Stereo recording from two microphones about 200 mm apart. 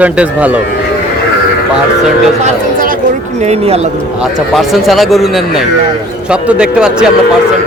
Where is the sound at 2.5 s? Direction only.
45° right (ahead or behind).